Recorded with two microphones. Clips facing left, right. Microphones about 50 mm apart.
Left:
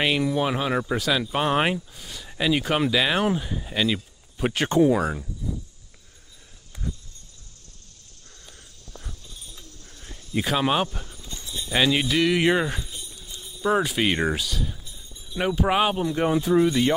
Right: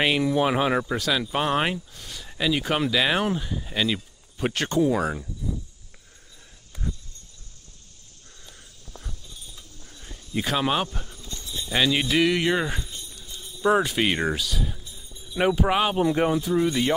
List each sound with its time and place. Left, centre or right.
0.0 s speech: centre
0.8 s speech: centre
4.6 s speech: left
4.9 s speech: centre
8.5 s walk: centre
9.8 s a sound: centre
11.3 s keys jangling: centre
12.1 s speech: centre
12.4 s speech: centre
12.6 s speech: centre
13.2 s a sound: centre
14.5 s speech: centre